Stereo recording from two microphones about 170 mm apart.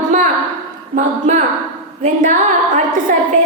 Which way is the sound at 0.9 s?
45° right (ahead or behind).